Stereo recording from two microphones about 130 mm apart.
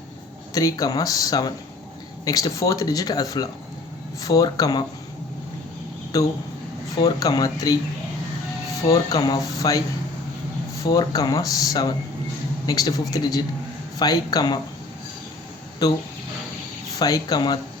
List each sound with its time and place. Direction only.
0.5 s speech: 25° left (ahead or behind)
6.1 s speech: 25° left (ahead or behind)
8.9 s speech: 30° left (ahead or behind)
10.9 s speech: 30° left (ahead or behind)
15.8 s speech: 30° left (ahead or behind)
17.0 s speech: 30° left (ahead or behind)